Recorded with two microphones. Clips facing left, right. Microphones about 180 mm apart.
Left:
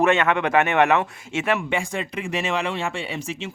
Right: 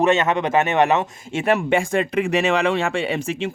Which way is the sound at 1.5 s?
45° right (ahead or behind).